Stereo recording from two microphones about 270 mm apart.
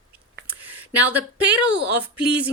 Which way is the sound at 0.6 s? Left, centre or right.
Centre.